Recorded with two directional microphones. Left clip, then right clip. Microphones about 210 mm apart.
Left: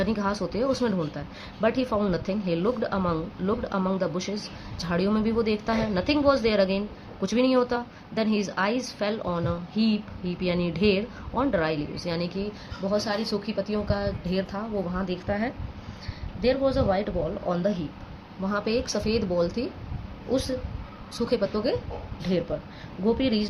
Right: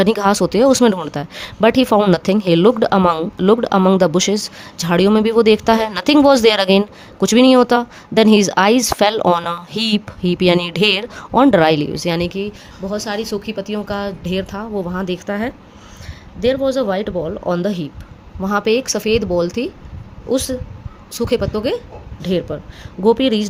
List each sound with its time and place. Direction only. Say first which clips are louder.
0.0 s speech: right 13 dB; 55° right (ahead or behind)
21.1 s speech: right 8 dB; 50° right (ahead or behind)